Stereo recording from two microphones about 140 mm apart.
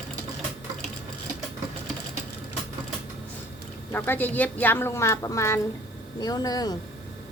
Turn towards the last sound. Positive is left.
turn(degrees=30)  # may be behind; listen again after turning